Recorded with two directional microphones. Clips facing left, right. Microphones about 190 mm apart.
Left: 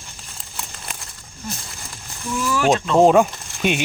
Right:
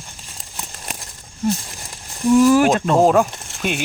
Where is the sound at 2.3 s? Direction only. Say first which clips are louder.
Right 7 dB; 45° right (ahead or behind).